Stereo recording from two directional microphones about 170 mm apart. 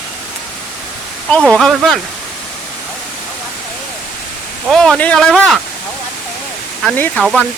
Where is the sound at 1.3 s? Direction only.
5° left (ahead or behind).